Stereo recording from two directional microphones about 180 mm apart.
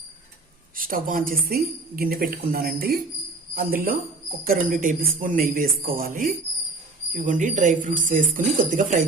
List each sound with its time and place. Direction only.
0.8 s a woman's voice: 50° right (ahead or behind)